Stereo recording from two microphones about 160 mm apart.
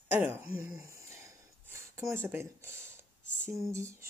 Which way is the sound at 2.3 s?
15° right (ahead or behind).